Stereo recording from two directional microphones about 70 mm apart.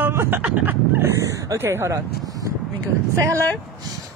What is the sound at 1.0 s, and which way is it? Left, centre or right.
Speech, right.